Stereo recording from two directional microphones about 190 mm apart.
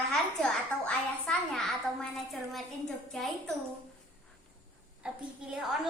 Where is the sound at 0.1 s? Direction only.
5° left (ahead or behind).